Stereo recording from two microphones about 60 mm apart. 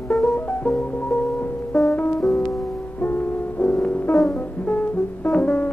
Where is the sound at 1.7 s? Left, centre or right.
Centre.